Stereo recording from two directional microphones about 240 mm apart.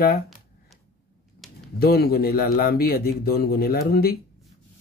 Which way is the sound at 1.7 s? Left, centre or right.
Left.